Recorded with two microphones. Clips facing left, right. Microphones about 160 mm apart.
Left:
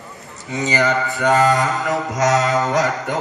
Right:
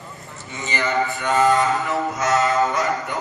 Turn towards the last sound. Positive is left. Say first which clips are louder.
# left 4 dB
turn(degrees=90)